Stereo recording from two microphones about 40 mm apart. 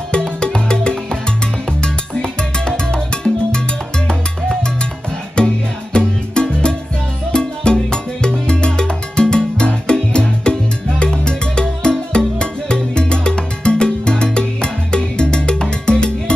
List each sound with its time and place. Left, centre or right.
0.1 s music: centre
5.4 s music: left